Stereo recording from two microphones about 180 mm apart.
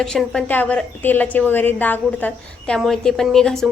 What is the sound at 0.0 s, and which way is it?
A woman's voice, 5° left (ahead or behind).